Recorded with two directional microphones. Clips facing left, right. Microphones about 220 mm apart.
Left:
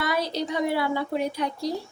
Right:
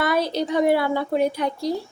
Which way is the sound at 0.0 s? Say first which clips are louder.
Right 5 dB; 55° right (ahead or behind).